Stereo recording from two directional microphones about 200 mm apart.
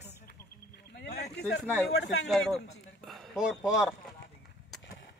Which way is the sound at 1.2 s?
55° left (ahead or behind).